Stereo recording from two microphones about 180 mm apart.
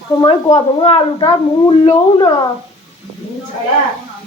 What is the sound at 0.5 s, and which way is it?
Speech, 35° left (ahead or behind).